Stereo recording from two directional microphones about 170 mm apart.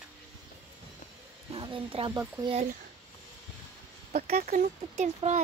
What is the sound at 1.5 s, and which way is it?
Speech, 30° right (ahead or behind).